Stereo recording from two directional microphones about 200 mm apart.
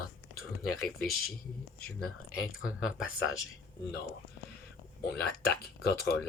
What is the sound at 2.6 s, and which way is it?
Speech, 5° right (ahead or behind).